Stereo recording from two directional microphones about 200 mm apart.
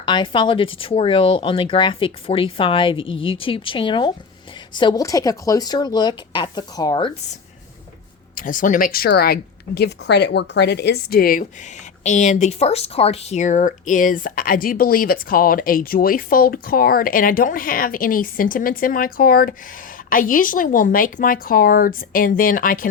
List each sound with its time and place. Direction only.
0.0 s speech: 25° left (ahead or behind)
8.4 s a woman's voice: 40° left (ahead or behind)